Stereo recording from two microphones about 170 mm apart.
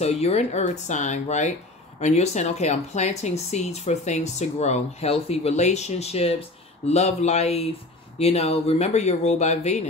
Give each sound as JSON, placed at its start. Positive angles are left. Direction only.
{"t": 0.0, "sound": "speech", "side_deg": 40}